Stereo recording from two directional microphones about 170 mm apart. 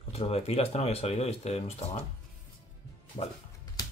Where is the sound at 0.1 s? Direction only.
35° left (ahead or behind).